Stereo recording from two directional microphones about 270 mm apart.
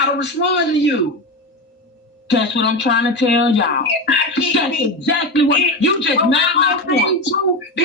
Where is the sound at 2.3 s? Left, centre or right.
Left.